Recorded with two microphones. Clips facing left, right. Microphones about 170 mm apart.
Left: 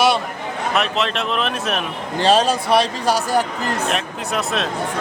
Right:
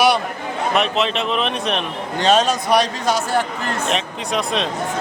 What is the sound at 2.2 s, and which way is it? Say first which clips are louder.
A man's voice: even; 30° left (ahead or behind).